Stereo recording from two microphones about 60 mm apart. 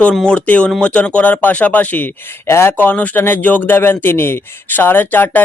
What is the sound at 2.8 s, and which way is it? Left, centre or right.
Speech, left.